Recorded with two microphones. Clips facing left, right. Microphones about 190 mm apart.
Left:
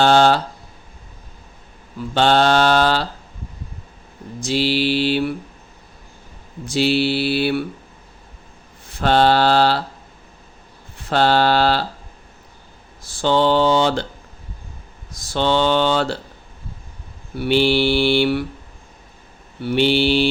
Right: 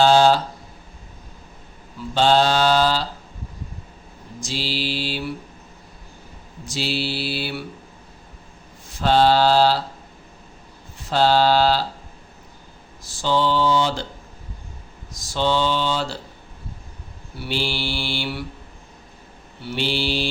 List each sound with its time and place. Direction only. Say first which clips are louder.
0.0 s speech: left 1 dB; 60° left (ahead or behind)
2.1 s speech: left 2 dB; 60° left (ahead or behind)
4.4 s speech: left 8 dB; 60° left (ahead or behind)
6.7 s speech: left 8 dB; 60° left (ahead or behind)
8.9 s speech: left 1 dB; 60° left (ahead or behind)
11.1 s speech: left 1 dB; 60° left (ahead or behind)
13.0 s speech: left 4 dB; 60° left (ahead or behind)
15.1 s speech: left 3 dB; 60° left (ahead or behind)
17.3 s speech: left 10 dB; 60° left (ahead or behind)
19.6 s speech: left 8 dB; 60° left (ahead or behind)